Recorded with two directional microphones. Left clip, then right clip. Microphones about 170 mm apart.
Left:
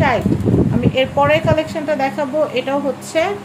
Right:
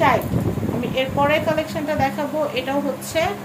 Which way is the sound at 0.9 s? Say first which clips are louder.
Left 4 dB; 40° left (ahead or behind).